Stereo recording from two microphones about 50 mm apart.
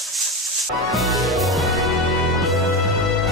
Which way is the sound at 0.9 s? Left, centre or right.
Centre.